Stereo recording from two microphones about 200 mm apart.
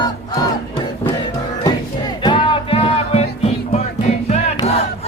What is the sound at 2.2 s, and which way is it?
Music, 25° left (ahead or behind).